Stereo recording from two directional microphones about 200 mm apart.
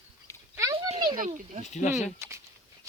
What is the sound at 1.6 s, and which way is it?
Speech, 35° left (ahead or behind).